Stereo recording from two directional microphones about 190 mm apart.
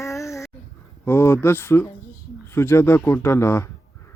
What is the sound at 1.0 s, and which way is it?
Speech, 15° left (ahead or behind).